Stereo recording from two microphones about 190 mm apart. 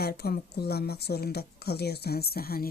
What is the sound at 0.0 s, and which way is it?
Speech, 55° left (ahead or behind).